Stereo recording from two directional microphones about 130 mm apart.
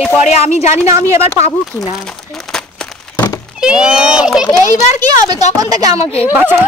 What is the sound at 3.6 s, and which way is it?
Speech, 5° right (ahead or behind).